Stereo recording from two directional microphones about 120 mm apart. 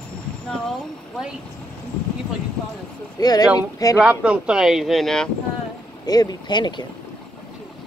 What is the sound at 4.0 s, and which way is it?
Speech, 10° right (ahead or behind).